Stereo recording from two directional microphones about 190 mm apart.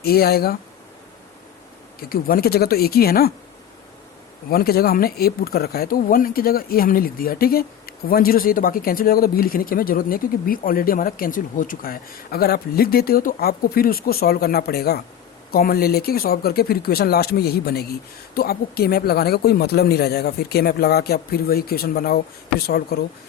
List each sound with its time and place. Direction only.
0.0 s speech: 55° left (ahead or behind)
2.0 s speech: 50° left (ahead or behind)
4.4 s speech: 55° left (ahead or behind)